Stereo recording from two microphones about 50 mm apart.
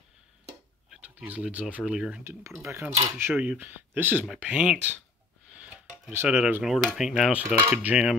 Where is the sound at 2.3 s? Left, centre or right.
Right.